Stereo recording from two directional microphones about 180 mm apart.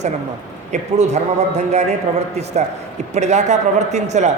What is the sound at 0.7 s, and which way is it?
A man's voice, 40° right (ahead or behind).